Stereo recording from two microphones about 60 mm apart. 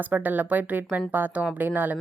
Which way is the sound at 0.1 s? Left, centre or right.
Right.